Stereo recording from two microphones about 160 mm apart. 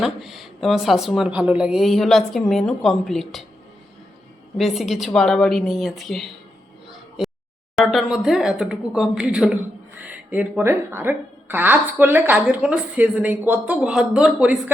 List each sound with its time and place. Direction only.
0.0 s speech: centre (ahead or behind)
4.5 s speech: centre (ahead or behind)
7.9 s a woman's voice: centre (ahead or behind)